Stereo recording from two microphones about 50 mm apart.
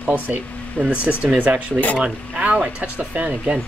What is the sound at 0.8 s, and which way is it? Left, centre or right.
Speech, left.